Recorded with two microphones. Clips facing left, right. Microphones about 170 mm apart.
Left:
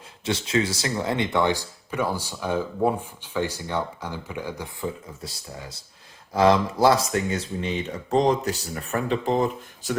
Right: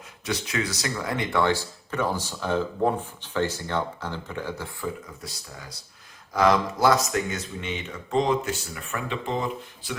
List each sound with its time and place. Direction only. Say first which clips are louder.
0.3 s speech: left 4 dB; 25° left (ahead or behind)
5.2 s speech: left 3 dB; 25° left (ahead or behind); by 10.0 s 40° left (ahead or behind)